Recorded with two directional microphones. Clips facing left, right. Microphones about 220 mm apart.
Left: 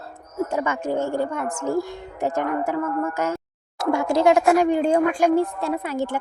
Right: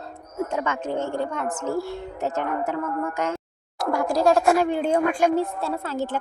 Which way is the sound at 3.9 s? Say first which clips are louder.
Left 2 dB; 25° left (ahead or behind).